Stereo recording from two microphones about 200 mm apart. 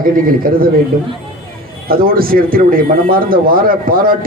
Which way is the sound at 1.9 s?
45° right (ahead or behind).